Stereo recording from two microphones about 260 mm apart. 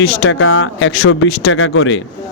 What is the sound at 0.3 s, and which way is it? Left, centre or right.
Speech, left.